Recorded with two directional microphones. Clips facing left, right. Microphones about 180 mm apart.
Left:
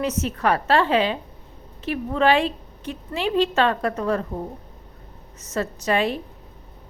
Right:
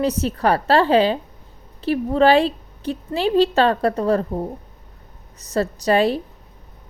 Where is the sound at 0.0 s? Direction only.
35° right (ahead or behind).